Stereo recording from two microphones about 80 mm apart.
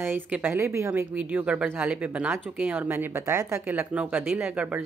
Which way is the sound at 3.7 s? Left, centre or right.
Centre.